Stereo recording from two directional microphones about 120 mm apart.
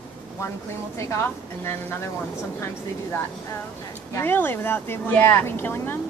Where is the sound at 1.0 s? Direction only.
25° left (ahead or behind).